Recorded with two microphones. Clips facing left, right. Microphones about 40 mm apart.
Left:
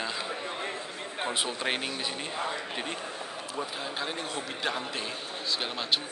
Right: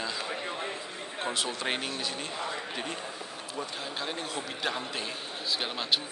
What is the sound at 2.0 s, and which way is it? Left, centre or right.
Speech, left.